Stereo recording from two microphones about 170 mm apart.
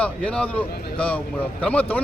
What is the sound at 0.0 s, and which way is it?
A man's voice, 5° left (ahead or behind).